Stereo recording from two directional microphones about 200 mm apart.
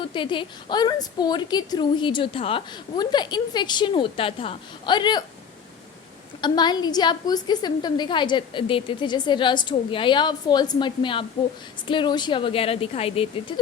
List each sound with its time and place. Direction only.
0.0 s a woman's voice: 25° left (ahead or behind)
6.4 s a woman's voice: 20° left (ahead or behind)